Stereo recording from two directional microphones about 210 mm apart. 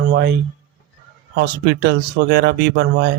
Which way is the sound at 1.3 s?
50° right (ahead or behind).